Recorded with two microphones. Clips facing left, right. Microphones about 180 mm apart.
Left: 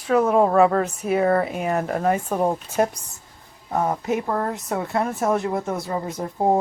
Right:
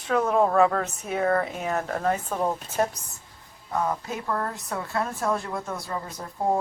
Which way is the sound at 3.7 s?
30° left (ahead or behind).